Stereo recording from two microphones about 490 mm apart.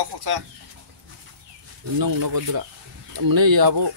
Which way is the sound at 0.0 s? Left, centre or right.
Right.